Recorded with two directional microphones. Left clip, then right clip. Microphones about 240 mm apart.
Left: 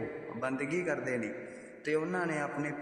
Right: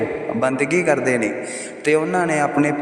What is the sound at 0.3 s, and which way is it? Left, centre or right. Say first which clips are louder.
A man's voice: right 15 dB; right.